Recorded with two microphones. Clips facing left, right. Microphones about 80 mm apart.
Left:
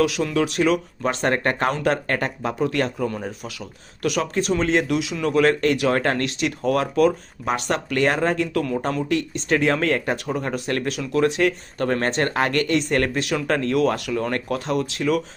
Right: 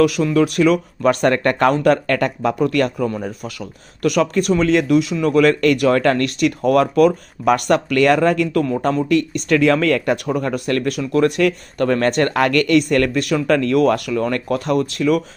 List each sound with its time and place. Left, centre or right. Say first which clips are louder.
0.0 s speech: right 6 dB; right
3.1 s speech: right 4 dB; right
8.5 s speech: right 5 dB; right